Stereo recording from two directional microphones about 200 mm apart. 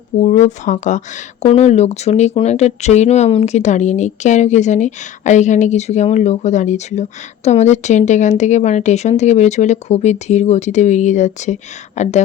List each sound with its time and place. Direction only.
0.2 s speech: 35° left (ahead or behind)